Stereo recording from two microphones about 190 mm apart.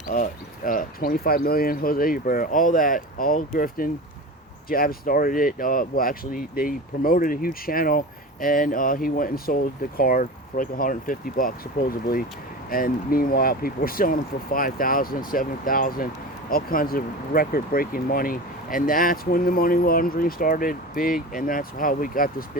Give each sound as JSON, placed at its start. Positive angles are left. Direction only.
{"t": 0.1, "sound": "speech", "side_deg": 45}